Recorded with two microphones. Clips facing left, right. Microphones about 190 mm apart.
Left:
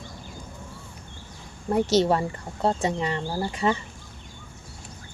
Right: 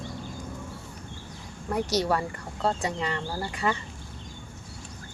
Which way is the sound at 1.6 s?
25° left (ahead or behind).